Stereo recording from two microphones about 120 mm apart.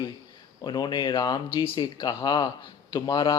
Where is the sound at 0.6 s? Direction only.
35° left (ahead or behind).